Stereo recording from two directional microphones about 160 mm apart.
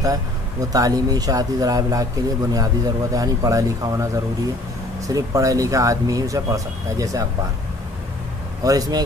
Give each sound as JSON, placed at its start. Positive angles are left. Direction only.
{"t": 0.0, "sound": "speech", "side_deg": -20}
{"t": 8.6, "sound": "speech", "side_deg": -25}